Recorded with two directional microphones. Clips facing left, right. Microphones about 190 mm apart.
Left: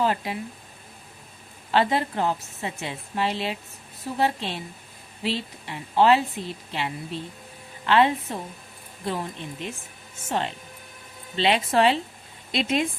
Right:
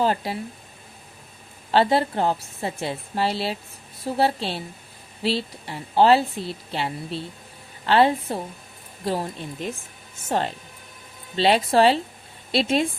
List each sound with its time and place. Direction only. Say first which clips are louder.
0.0 s speech: right 2 dB; 30° right (ahead or behind)
1.7 s a woman's voice: right 3 dB; 30° right (ahead or behind)